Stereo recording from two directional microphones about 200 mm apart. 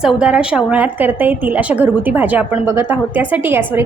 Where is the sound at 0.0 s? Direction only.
5° right (ahead or behind).